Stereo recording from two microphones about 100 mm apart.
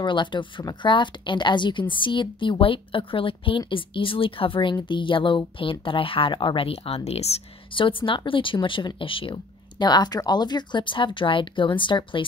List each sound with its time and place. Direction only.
0.0 s a woman's voice: 50° left (ahead or behind)